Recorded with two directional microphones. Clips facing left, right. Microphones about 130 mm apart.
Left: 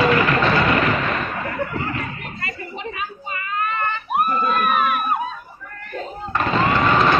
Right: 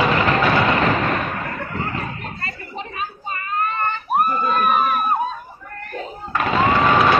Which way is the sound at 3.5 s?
35° right (ahead or behind).